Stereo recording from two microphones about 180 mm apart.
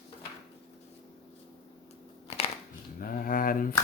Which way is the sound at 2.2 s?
35° left (ahead or behind).